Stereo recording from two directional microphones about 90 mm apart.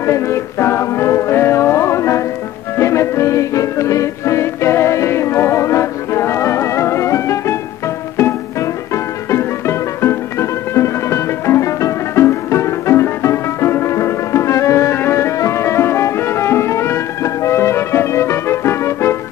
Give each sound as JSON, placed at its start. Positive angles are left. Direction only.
{"t": 0.0, "sound": "music", "side_deg": 30}